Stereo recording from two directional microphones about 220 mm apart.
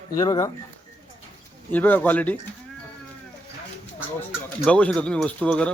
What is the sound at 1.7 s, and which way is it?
Speech, 10° left (ahead or behind).